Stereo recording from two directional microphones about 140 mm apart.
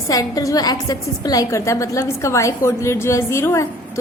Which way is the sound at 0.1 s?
25° left (ahead or behind).